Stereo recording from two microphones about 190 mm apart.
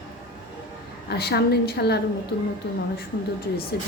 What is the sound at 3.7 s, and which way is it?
Speech, 55° left (ahead or behind).